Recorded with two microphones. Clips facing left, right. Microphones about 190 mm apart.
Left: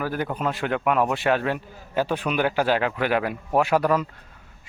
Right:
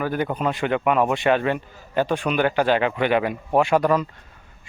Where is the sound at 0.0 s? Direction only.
5° left (ahead or behind).